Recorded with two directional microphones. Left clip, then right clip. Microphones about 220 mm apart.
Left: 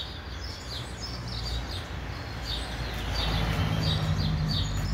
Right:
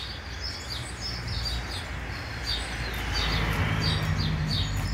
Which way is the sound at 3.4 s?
60° left (ahead or behind).